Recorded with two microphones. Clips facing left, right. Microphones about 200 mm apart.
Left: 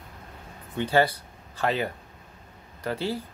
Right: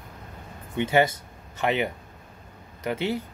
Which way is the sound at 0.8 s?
20° right (ahead or behind).